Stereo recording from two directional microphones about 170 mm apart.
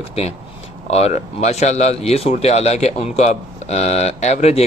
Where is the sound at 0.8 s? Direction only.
40° left (ahead or behind).